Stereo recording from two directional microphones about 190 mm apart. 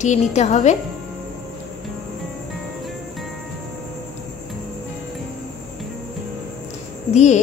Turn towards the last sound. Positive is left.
turn(degrees=40)  # may be behind; listen again after turning